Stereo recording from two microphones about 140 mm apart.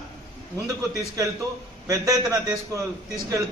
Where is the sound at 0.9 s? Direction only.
25° right (ahead or behind).